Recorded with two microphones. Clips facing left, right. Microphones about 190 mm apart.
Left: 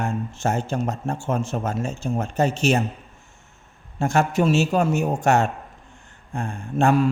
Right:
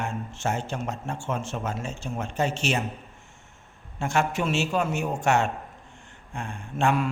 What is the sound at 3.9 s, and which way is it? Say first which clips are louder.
Speech: left 5 dB; 40° left (ahead or behind).